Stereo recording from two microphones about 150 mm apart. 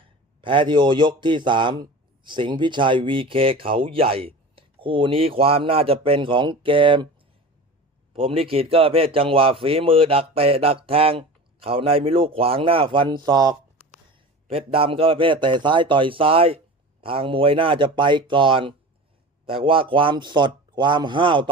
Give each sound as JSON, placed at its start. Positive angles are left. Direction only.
{"t": 0.4, "sound": "a man's voice", "side_deg": -35}
{"t": 8.1, "sound": "a man's voice", "side_deg": -40}
{"t": 14.1, "sound": "a man's voice", "side_deg": -40}